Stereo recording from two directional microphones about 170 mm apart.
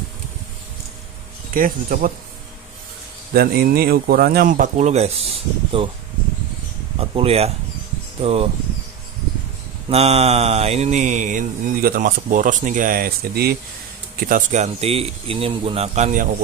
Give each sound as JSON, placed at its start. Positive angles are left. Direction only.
{"t": 1.5, "sound": "speech", "side_deg": -55}
{"t": 3.3, "sound": "speech", "side_deg": -65}
{"t": 7.0, "sound": "speech", "side_deg": -35}
{"t": 9.8, "sound": "mantra", "side_deg": -35}
{"t": 14.2, "sound": "speech", "side_deg": -50}